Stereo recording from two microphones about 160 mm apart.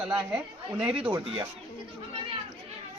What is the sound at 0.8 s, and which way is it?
Speech, 35° right (ahead or behind).